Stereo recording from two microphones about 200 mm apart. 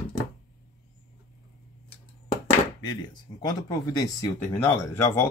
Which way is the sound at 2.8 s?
20° left (ahead or behind).